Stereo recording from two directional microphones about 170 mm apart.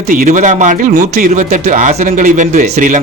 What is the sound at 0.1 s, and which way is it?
Speech, 50° right (ahead or behind).